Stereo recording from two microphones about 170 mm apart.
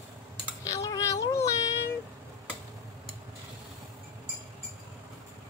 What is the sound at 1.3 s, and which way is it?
Child singing, 20° left (ahead or behind).